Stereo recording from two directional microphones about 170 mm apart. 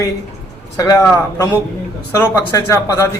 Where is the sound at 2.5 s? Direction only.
20° left (ahead or behind).